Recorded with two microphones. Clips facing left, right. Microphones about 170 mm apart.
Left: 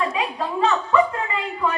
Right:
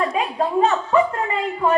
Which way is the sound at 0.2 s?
45° right (ahead or behind).